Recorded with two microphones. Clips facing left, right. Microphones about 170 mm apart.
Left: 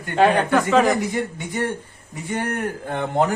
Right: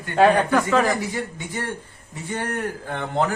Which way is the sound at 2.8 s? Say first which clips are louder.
Left 3 dB; 20° left (ahead or behind).